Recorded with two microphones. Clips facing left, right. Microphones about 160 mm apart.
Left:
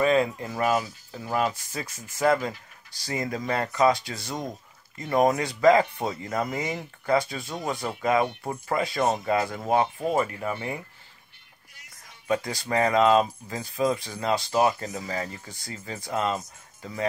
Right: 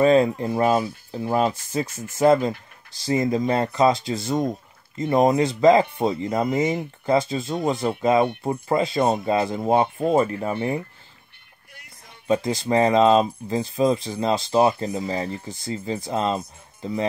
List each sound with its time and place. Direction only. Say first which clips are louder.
0.0 s speech: right 6 dB; 30° right (ahead or behind)
11.7 s music: right 5 dB; 60° right (ahead or behind)
12.3 s speech: right 6 dB; 25° right (ahead or behind)